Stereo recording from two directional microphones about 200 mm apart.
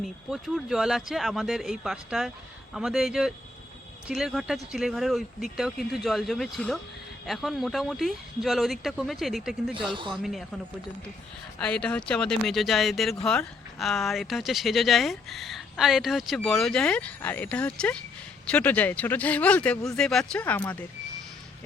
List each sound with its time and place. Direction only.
0.0 s speech: centre (ahead or behind)
9.9 s speech: 25° right (ahead or behind)
11.6 s speech: 5° left (ahead or behind)